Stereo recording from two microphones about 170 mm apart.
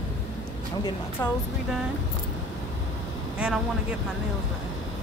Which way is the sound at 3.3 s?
5° right (ahead or behind).